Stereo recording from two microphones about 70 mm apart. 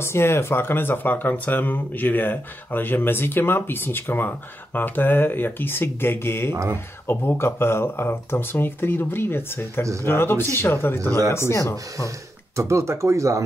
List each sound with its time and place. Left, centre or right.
0.0 s speech: left
12.5 s speech: right